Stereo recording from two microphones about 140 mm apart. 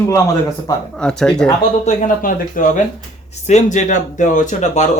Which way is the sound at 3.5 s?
60° left (ahead or behind).